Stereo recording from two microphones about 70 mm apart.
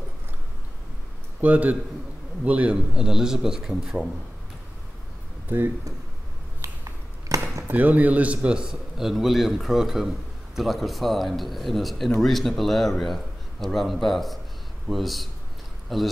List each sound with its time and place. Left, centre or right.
1.4 s a man's voice: right
6.6 s a sound: right
7.7 s a man's voice: right; by 16.1 s centre